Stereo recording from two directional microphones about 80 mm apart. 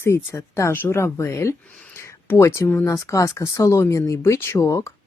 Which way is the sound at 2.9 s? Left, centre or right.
Left.